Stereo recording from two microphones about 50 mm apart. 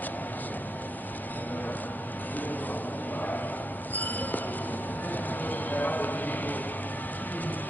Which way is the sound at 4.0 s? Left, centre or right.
Left.